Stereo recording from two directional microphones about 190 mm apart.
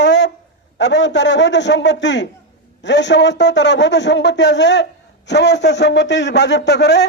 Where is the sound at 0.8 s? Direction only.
70° left (ahead or behind).